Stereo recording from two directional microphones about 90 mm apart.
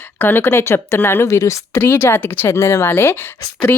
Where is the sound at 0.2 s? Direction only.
20° left (ahead or behind).